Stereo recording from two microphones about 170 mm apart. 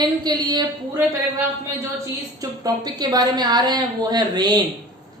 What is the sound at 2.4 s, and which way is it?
A man's voice, 20° right (ahead or behind).